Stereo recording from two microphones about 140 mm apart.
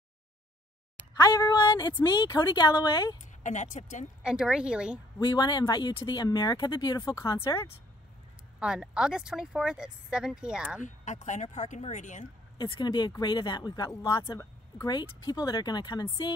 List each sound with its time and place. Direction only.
1.2 s speech: 30° left (ahead or behind)
3.4 s speech: 65° left (ahead or behind)
4.2 s speech: 5° right (ahead or behind)
5.2 s speech: 30° left (ahead or behind)
8.5 s speech: 5° right (ahead or behind)
10.8 s speech: 60° left (ahead or behind)
12.5 s speech: 30° left (ahead or behind)
14.2 s speech: 20° left (ahead or behind)